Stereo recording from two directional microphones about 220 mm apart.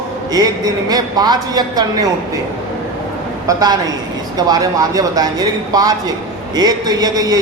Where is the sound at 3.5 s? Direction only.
15° right (ahead or behind).